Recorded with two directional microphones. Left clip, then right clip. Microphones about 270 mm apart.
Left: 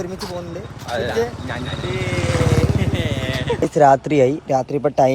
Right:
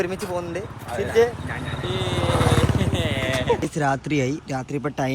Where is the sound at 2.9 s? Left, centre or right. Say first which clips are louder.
Even; centre.